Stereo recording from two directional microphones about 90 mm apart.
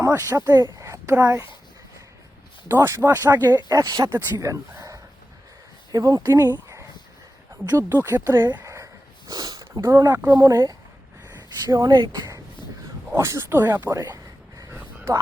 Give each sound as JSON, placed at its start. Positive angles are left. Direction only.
{"t": 0.0, "sound": "speech", "side_deg": -35}
{"t": 0.8, "sound": "a sound", "side_deg": -35}
{"t": 1.1, "sound": "speech", "side_deg": -20}
{"t": 2.6, "sound": "speech", "side_deg": -30}
{"t": 3.7, "sound": "speech", "side_deg": -45}
{"t": 7.7, "sound": "speech", "side_deg": -30}
{"t": 8.6, "sound": "a sound", "side_deg": -35}
{"t": 10.2, "sound": "speech", "side_deg": -30}
{"t": 11.4, "sound": "speech", "side_deg": -45}
{"t": 13.1, "sound": "speech", "side_deg": -35}
{"t": 14.6, "sound": "a sound", "side_deg": -30}